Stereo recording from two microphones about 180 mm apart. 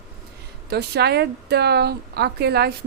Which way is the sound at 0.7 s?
65° right (ahead or behind).